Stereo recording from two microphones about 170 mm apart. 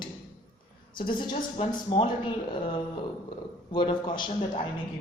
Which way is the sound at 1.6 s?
30° left (ahead or behind).